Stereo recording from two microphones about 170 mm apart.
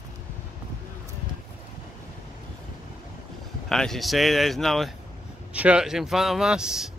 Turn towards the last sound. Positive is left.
turn(degrees=-5)  # may be behind; listen again after turning